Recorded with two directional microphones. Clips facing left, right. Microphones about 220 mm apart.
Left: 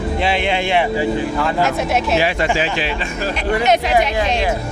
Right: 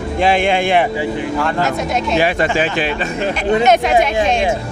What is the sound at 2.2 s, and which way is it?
Speech, 50° right (ahead or behind).